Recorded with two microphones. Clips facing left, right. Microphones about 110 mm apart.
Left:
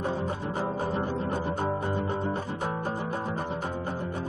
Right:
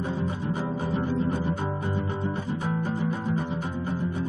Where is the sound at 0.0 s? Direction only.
40° left (ahead or behind).